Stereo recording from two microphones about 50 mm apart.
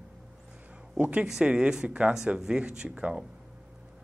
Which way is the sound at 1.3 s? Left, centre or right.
Centre.